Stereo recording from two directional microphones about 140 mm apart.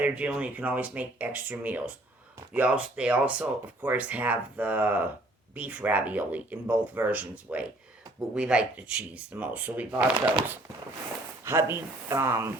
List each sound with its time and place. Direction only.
0.0 s speech: 10° right (ahead or behind)
11.4 s speech: 20° right (ahead or behind)